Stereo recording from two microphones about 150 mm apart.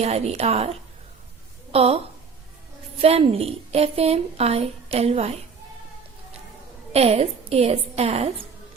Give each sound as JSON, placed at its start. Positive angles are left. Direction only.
{"t": 0.0, "sound": "a woman's voice", "side_deg": -45}
{"t": 3.0, "sound": "a woman's voice", "side_deg": -40}
{"t": 6.9, "sound": "a woman's voice", "side_deg": -45}